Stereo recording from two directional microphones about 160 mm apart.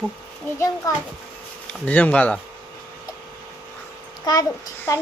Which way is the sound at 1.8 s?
10° left (ahead or behind).